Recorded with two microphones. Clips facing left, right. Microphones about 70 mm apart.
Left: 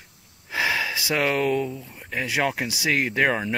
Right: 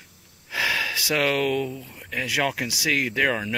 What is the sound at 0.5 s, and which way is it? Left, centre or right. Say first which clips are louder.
Gasp: left 1 dB; left.